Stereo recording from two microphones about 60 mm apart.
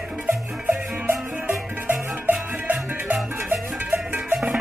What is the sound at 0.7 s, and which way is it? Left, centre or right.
Music, right.